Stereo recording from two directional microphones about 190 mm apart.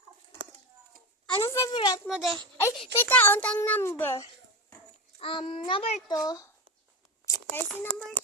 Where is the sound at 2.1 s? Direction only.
Centre (ahead or behind).